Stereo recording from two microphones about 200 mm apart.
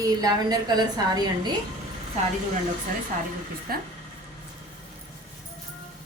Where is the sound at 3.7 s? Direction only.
50° right (ahead or behind).